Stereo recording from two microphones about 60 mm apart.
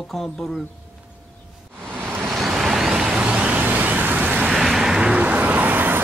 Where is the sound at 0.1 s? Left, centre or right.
Centre.